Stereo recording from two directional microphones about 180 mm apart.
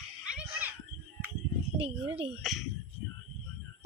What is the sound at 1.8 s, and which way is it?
Speech, 30° right (ahead or behind).